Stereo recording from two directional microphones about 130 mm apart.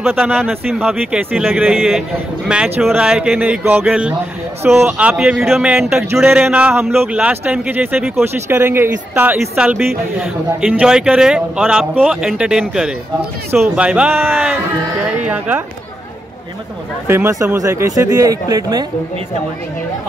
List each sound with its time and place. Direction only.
0.1 s a man's voice: 10° right (ahead or behind)
0.4 s a man's voice: centre (ahead or behind)
17.1 s speech: 20° right (ahead or behind)